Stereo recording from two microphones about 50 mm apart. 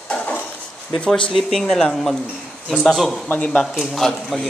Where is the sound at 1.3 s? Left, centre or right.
Centre.